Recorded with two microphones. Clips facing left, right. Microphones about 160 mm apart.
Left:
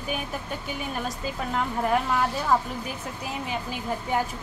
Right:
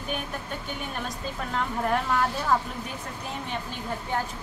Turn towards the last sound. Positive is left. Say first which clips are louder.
# left 3 dB
turn(degrees=5)  # may be behind; listen again after turning